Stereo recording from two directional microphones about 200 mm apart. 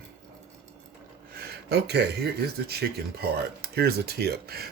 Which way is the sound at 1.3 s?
55° right (ahead or behind).